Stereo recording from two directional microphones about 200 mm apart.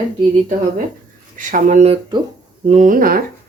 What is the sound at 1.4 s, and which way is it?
Speech, 40° right (ahead or behind).